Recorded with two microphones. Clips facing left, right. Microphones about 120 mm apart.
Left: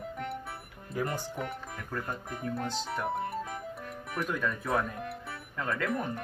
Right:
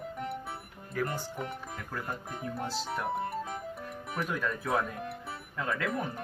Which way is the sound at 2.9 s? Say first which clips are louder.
Even; centre (ahead or behind).